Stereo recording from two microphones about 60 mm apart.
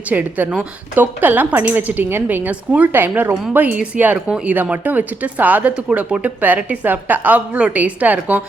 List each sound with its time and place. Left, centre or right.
0.1 s a woman's voice: right
2.9 s a woman's voice: right